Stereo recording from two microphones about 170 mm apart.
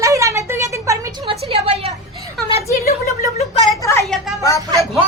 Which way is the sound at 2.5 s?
35° left (ahead or behind).